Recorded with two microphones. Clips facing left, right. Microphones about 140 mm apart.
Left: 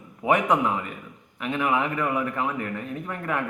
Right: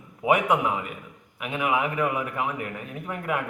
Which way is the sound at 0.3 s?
10° right (ahead or behind).